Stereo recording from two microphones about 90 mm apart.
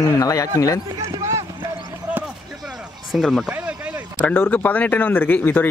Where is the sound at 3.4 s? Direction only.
15° right (ahead or behind).